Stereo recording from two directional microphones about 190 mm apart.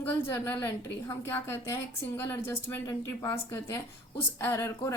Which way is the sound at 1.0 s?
15° left (ahead or behind).